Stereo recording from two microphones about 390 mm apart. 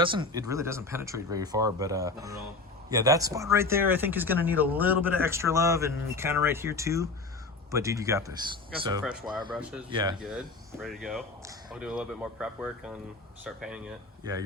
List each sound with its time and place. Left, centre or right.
0.0 s speech: centre